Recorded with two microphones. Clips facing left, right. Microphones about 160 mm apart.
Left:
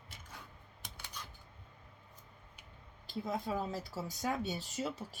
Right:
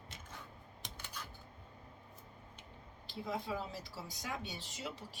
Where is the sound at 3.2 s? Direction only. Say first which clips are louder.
Left 3 dB; 45° left (ahead or behind).